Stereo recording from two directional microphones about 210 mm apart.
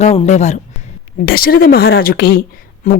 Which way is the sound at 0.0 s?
30° left (ahead or behind).